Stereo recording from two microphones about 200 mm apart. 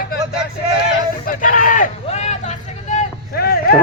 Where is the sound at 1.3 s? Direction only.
40° left (ahead or behind).